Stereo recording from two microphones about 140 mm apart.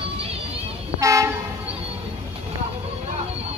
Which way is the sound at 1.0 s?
20° right (ahead or behind).